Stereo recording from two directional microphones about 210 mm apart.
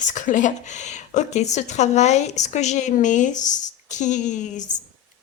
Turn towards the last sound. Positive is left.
turn(degrees=35)  # may be behind; listen again after turning